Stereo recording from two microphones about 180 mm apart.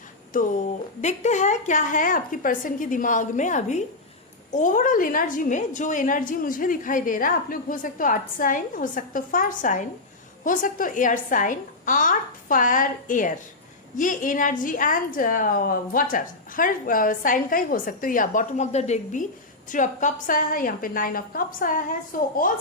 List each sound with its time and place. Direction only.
0.3 s a woman's voice: 45° left (ahead or behind)